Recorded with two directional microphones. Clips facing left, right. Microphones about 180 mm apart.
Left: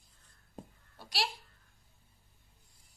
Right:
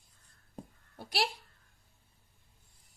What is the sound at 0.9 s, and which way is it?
Speech, 55° right (ahead or behind).